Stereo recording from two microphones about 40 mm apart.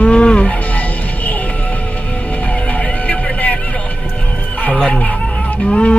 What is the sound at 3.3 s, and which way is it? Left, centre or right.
Vehicle, left.